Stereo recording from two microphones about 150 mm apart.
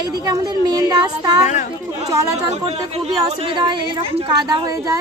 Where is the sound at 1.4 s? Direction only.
50° left (ahead or behind).